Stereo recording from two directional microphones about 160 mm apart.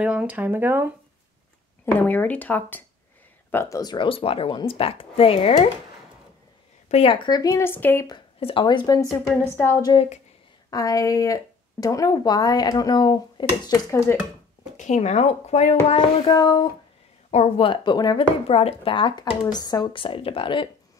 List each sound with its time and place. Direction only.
0.0 s speech: 10° right (ahead or behind)
1.9 s speech: 10° left (ahead or behind); by 5.7 s 35° left (ahead or behind)
6.9 s speech: 35° left (ahead or behind); by 8.1 s 15° left (ahead or behind)
8.1 s speech: 35° left (ahead or behind); by 14.1 s 20° left (ahead or behind)
14.8 s speech: 45° left (ahead or behind)
16.3 s speech: 25° left (ahead or behind)
17.3 s a woman's voice: 45° left (ahead or behind)
17.6 s speech: 30° left (ahead or behind)
18.5 s speech: 40° left (ahead or behind)